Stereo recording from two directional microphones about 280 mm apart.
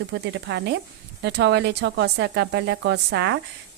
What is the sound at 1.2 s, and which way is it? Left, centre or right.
A woman's voice, right.